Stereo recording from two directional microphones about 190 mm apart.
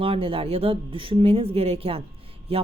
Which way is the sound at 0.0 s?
30° right (ahead or behind).